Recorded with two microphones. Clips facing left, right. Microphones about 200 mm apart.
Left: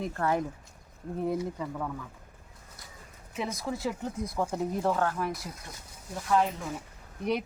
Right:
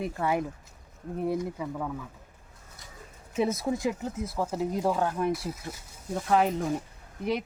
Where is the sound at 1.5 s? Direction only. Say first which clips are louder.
Right 1 dB; 10° right (ahead or behind).